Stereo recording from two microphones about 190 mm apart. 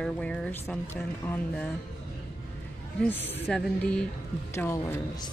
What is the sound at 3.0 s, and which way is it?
Speech, 10° left (ahead or behind).